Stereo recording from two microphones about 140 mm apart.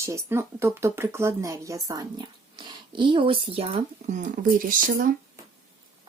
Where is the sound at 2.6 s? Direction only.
35° right (ahead or behind).